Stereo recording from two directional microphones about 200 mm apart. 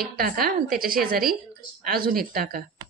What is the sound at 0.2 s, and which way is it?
A woman's voice, 50° right (ahead or behind).